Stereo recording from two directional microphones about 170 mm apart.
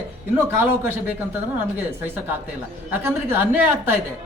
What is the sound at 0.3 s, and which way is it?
Speech, 15° right (ahead or behind).